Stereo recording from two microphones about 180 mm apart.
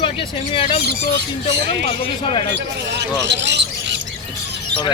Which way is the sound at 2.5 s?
70° right (ahead or behind).